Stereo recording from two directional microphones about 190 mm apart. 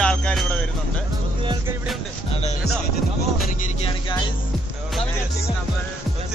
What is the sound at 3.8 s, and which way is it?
Music, 25° left (ahead or behind).